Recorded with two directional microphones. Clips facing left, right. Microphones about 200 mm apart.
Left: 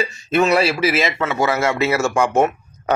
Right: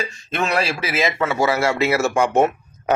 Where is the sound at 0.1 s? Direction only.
5° left (ahead or behind).